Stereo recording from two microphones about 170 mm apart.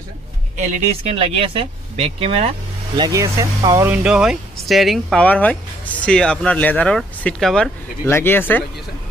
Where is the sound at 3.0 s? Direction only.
20° right (ahead or behind).